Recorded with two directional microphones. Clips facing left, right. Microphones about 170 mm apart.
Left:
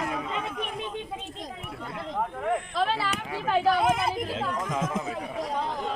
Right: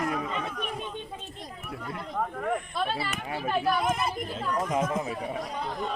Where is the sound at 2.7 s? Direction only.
90° left.